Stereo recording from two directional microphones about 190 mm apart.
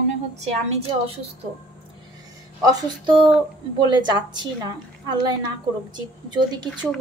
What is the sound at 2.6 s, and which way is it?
A woman's voice, 25° right (ahead or behind).